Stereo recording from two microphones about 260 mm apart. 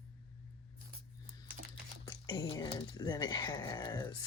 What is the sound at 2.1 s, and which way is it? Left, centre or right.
Speech, centre.